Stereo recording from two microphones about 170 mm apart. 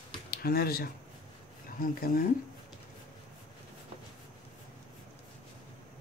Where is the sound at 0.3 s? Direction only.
65° left (ahead or behind).